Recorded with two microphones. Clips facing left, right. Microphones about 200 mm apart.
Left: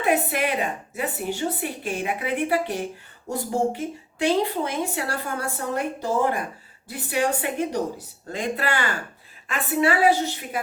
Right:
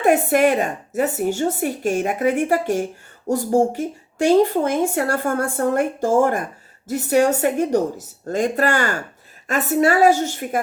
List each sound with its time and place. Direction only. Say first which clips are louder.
0.0 s speech: right 7 dB; 45° right (ahead or behind)